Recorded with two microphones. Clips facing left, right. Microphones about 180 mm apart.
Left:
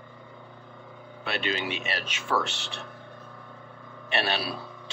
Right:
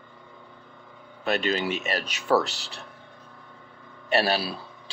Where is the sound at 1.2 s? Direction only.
45° right (ahead or behind).